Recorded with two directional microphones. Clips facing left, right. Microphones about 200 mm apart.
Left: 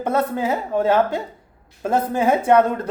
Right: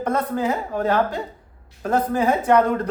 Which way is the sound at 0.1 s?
10° left (ahead or behind).